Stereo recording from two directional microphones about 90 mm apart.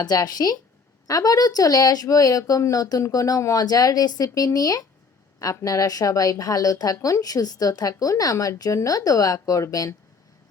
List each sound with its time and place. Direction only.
0.0 s speech: 45° left (ahead or behind)